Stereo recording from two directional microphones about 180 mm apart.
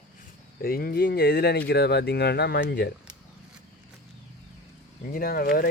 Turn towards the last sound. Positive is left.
turn(degrees=55)  # may be behind; listen again after turning